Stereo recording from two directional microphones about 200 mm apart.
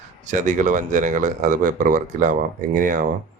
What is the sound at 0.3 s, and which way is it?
Speech, 40° right (ahead or behind).